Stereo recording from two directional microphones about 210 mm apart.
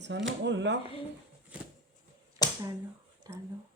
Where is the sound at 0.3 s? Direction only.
60° right (ahead or behind).